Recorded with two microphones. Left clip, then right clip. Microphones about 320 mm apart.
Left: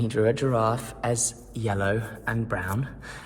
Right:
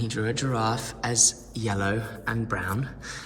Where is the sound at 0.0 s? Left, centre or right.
Centre.